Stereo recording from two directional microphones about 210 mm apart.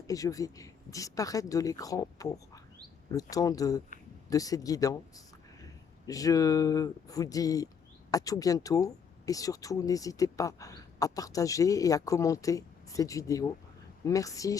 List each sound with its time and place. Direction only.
0.1 s speech: 15° left (ahead or behind)